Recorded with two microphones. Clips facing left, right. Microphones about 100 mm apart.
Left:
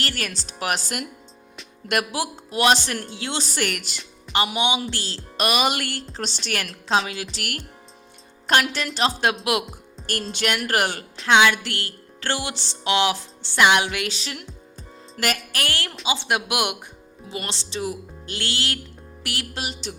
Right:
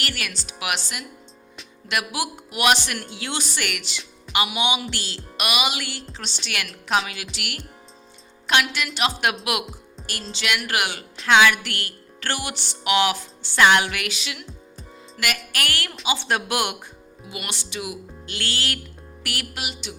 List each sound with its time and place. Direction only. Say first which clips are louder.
0.0 s speech: left 2 dB; 35° left (ahead or behind)
2.1 s speech: left 2 dB; 30° left (ahead or behind)
3.5 s speech: left 3 dB; 40° left (ahead or behind)
8.7 s speech: left 1 dB; 35° left (ahead or behind)
10.3 s speech: left 2 dB; 40° left (ahead or behind)
11.3 s music: even; 25° left (ahead or behind); by 15.4 s 40° left (ahead or behind)
15.5 s music: even; 25° left (ahead or behind)
17.2 s speech: left 2 dB; 30° left (ahead or behind)
18.4 s music: even; 25° left (ahead or behind)
19.2 s speech: left 1 dB; 25° left (ahead or behind)